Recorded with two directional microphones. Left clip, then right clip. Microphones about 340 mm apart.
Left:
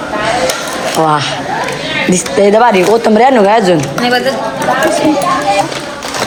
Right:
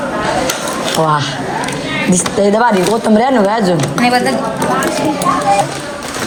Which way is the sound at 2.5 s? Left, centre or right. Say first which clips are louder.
Left 6 dB; centre.